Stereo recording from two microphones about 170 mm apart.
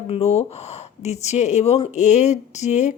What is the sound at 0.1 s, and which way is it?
Speech, 40° left (ahead or behind).